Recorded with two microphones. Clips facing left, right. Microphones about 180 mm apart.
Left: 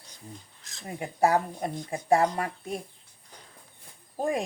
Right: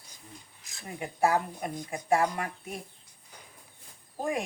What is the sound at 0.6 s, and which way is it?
Speech, 10° right (ahead or behind).